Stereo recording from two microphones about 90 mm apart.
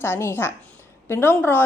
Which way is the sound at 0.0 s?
25° left (ahead or behind).